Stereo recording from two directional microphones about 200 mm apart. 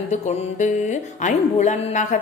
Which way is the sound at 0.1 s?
35° left (ahead or behind).